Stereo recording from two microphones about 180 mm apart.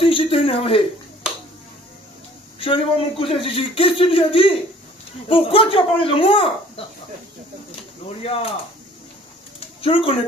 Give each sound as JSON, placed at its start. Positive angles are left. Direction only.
{"t": 0.0, "sound": "speech", "side_deg": 30}
{"t": 2.6, "sound": "speech", "side_deg": 30}
{"t": 8.2, "sound": "speech", "side_deg": 30}
{"t": 9.6, "sound": "bird", "side_deg": 30}